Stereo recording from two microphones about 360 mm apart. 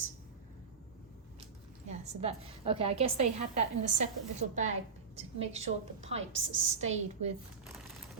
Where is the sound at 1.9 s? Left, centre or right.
Centre.